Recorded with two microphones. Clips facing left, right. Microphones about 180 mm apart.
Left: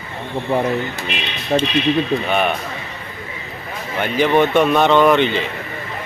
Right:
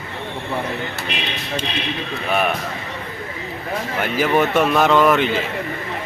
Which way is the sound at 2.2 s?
5° right (ahead or behind).